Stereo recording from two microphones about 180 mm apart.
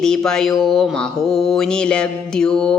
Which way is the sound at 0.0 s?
5° left (ahead or behind).